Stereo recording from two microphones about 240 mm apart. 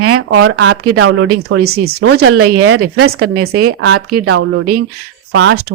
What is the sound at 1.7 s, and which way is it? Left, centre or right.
Speech, right.